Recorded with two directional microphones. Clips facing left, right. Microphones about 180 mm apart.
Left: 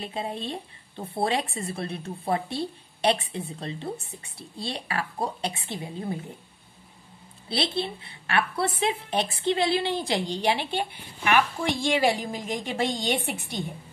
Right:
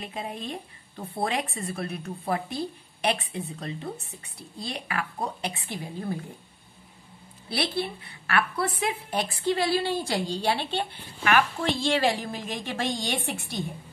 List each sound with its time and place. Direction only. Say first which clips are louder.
0.0 s a woman's voice: left 3 dB; 30° left (ahead or behind)
7.4 s a woman's voice: left 1 dB; 25° left (ahead or behind)